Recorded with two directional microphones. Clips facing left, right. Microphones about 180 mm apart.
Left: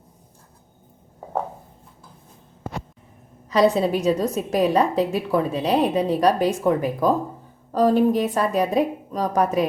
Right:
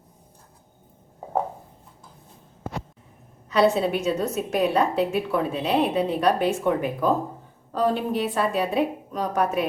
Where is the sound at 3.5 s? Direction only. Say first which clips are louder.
Left 2 dB; 35° left (ahead or behind).